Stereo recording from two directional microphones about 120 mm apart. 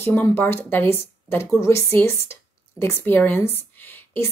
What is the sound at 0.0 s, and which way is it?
Speech, 20° left (ahead or behind).